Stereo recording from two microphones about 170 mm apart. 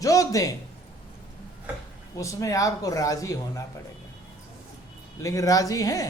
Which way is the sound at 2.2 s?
20° left (ahead or behind).